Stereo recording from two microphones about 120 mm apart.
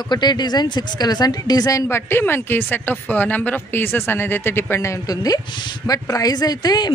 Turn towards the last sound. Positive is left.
turn(degrees=35)  # may be behind; listen again after turning